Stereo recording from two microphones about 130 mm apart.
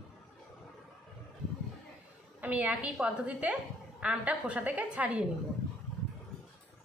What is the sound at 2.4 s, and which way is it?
A woman's voice, 10° right (ahead or behind).